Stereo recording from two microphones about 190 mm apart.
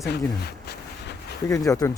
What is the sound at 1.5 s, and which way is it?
Speech, 20° left (ahead or behind).